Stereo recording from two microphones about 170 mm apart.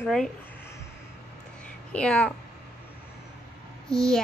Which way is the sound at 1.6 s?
5° left (ahead or behind).